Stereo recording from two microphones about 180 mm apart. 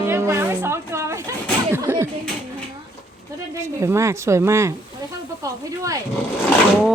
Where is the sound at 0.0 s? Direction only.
15° right (ahead or behind).